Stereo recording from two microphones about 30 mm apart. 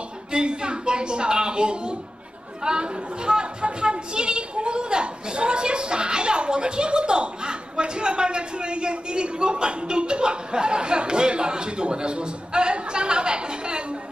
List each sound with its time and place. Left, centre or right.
0.3 s a woman's voice: right